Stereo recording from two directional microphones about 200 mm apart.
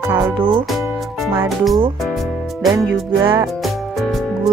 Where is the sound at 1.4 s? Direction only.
Centre (ahead or behind).